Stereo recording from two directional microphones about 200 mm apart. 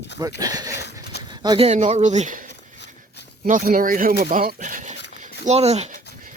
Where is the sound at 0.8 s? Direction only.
55° left (ahead or behind).